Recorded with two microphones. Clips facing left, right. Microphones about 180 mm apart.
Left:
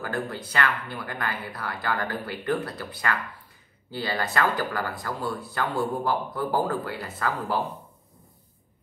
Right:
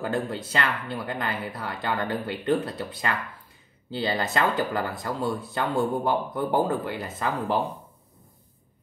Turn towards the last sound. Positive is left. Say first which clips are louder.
# right 2 dB
turn(degrees=-20)  # may be behind; listen again after turning